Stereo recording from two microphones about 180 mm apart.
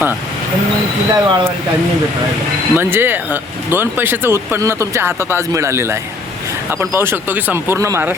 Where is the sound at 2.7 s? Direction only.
10° right (ahead or behind).